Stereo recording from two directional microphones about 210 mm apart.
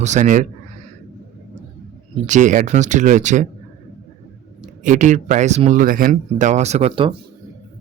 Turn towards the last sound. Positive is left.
turn(degrees=-25)  # may be behind; listen again after turning